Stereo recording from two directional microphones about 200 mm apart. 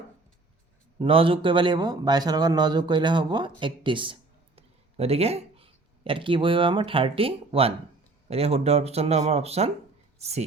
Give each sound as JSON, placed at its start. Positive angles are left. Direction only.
{"t": 0.9, "sound": "speech", "side_deg": -25}